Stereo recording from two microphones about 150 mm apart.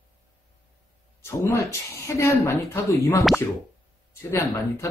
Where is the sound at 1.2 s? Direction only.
20° left (ahead or behind).